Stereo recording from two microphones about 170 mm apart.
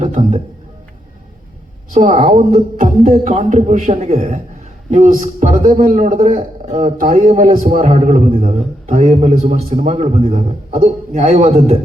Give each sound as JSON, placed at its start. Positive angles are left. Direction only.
{"t": 0.0, "sound": "a man's voice", "side_deg": -45}
{"t": 1.9, "sound": "a man's voice", "side_deg": -45}
{"t": 2.3, "sound": "a man's voice", "side_deg": -35}
{"t": 2.7, "sound": "a man's voice", "side_deg": -50}